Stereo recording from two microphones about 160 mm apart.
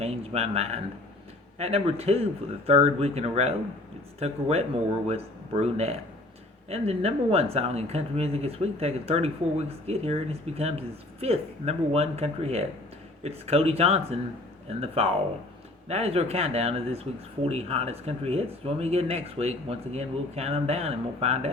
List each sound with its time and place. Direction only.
0.0 s speech: 40° right (ahead or behind)